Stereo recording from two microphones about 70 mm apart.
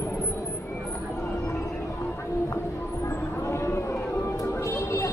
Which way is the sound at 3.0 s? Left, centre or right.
Left.